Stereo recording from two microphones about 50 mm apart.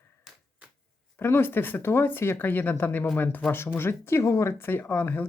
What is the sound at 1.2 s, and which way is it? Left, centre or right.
Speech, left.